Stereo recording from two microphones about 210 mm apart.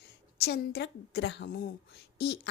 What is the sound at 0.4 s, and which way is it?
A woman's voice, 50° left (ahead or behind).